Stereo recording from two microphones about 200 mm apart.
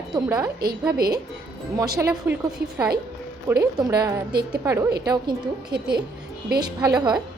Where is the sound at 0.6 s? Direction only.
50° right (ahead or behind).